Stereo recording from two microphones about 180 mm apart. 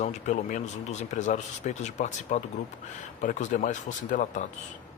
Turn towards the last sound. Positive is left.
turn(degrees=45)  # may be behind; listen again after turning